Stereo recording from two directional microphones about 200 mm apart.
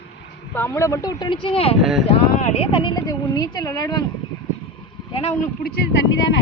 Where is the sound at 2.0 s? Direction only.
30° left (ahead or behind).